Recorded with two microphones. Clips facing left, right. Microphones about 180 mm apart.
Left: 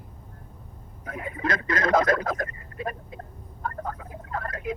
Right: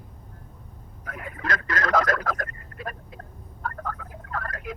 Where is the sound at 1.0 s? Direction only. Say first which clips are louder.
Left 4 dB; 25° left (ahead or behind).